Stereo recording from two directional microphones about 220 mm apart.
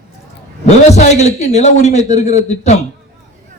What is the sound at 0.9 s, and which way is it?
A man's voice, 30° left (ahead or behind).